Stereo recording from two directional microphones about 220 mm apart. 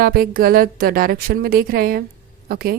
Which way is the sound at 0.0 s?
40° right (ahead or behind).